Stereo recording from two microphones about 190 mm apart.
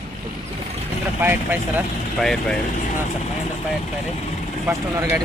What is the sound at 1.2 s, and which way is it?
Speech, 10° right (ahead or behind).